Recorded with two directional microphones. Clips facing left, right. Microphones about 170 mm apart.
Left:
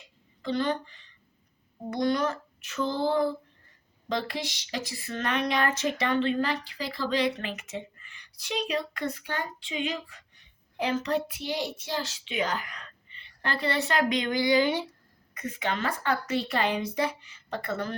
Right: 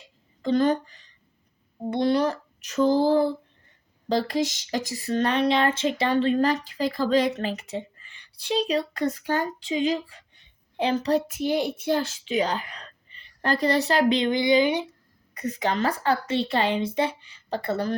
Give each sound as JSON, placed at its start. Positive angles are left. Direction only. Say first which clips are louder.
{"t": 0.4, "sound": "a woman's voice", "louder": "right 7 dB", "side_deg": -45}
{"t": 1.9, "sound": "speech", "louder": "right 4 dB", "side_deg": -30}
{"t": 15.4, "sound": "speech", "louder": "right 5 dB", "side_deg": -40}